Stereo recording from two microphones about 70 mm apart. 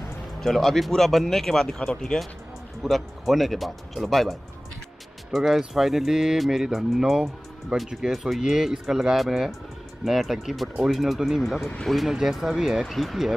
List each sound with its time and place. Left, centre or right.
0.4 s speech: centre